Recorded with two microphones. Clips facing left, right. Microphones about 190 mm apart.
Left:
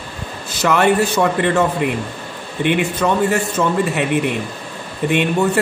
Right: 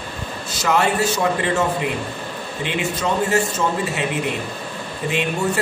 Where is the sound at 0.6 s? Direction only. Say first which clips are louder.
Left 4 dB; 60° left (ahead or behind).